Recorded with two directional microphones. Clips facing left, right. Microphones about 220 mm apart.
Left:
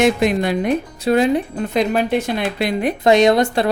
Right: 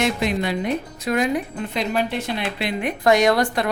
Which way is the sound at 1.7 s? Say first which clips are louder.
Left 6 dB; 45° left (ahead or behind).